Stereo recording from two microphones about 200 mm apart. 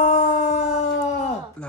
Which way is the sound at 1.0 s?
35° left (ahead or behind).